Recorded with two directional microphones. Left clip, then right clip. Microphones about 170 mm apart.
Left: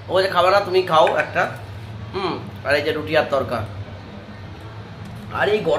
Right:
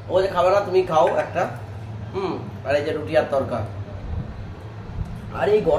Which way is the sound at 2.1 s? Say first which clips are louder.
Left 2 dB; 10° left (ahead or behind).